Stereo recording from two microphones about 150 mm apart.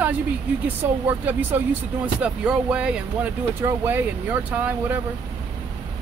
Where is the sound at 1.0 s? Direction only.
15° right (ahead or behind).